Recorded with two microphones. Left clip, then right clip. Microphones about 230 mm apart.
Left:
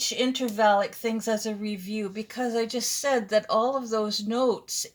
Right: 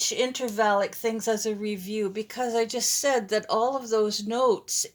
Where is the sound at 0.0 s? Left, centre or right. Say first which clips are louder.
Even; right.